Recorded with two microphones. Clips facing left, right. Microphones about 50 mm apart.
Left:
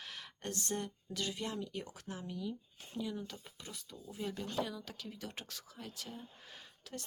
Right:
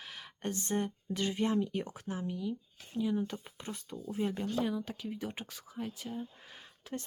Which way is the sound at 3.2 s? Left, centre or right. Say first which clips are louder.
Right 9 dB; right.